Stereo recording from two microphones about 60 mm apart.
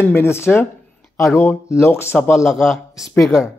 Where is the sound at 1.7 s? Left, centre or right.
Left.